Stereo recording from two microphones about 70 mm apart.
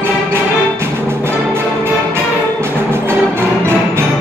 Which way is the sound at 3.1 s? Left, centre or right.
Right.